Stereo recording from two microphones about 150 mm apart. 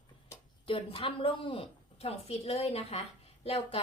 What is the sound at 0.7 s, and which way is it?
A woman's voice, 40° left (ahead or behind).